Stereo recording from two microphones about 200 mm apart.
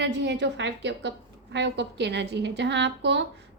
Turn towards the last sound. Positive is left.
turn(degrees=-60)  # may be behind; listen again after turning